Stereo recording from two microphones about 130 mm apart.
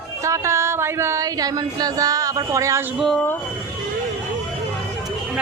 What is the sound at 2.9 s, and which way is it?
Speech, centre (ahead or behind).